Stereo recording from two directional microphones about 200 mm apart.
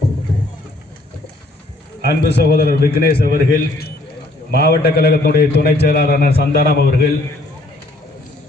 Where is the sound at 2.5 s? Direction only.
50° left (ahead or behind).